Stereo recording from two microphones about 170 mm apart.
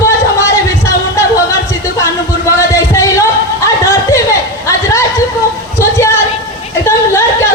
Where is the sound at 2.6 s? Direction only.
15° left (ahead or behind).